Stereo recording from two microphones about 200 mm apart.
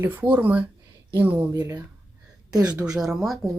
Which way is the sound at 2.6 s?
5° right (ahead or behind).